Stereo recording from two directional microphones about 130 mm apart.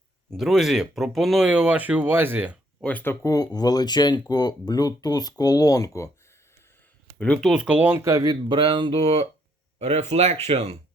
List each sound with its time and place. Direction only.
0.3 s speech: centre (ahead or behind)
2.8 s speech: 15° left (ahead or behind)
3.3 s speech: 30° left (ahead or behind)
7.2 s speech: 5° left (ahead or behind)
7.5 s speech: 10° right (ahead or behind); by 9.2 s 45° right (ahead or behind)
9.7 s speech: 55° right (ahead or behind)